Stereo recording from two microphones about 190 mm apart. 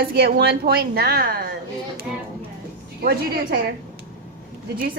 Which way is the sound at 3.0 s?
55° right (ahead or behind).